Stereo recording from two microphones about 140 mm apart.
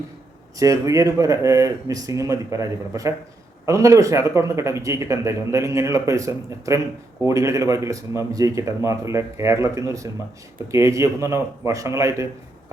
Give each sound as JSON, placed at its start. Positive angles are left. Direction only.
{"t": 0.5, "sound": "speech", "side_deg": -25}